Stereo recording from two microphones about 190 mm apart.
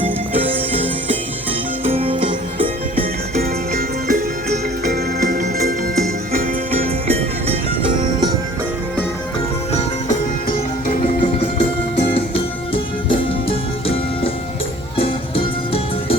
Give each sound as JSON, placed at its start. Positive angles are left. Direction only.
{"t": 0.3, "sound": "music", "side_deg": -30}
{"t": 3.3, "sound": "music", "side_deg": -50}
{"t": 7.1, "sound": "music", "side_deg": -30}
{"t": 11.0, "sound": "music", "side_deg": 30}
{"t": 12.7, "sound": "music", "side_deg": 30}